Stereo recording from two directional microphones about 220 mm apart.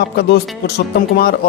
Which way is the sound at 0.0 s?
50° left (ahead or behind).